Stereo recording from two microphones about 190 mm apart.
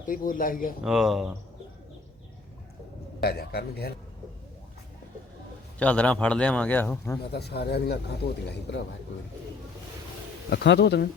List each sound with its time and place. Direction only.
0.0 s speech: 45° left (ahead or behind)
0.9 s speech: centre (ahead or behind)
3.2 s speech: 55° left (ahead or behind)
5.8 s a man's voice: 5° left (ahead or behind)
7.3 s speech: 60° left (ahead or behind)
10.5 s speech: 65° left (ahead or behind)